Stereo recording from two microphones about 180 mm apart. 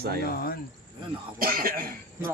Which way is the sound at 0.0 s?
60° right (ahead or behind).